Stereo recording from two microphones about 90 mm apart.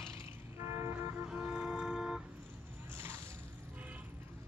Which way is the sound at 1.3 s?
10° right (ahead or behind).